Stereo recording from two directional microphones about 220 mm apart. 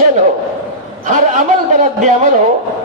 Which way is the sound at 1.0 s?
35° right (ahead or behind).